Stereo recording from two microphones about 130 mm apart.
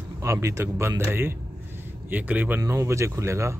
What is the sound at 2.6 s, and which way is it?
Speech, 25° right (ahead or behind).